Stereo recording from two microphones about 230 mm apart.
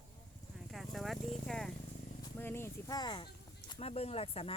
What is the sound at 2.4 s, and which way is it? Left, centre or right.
Speech, centre.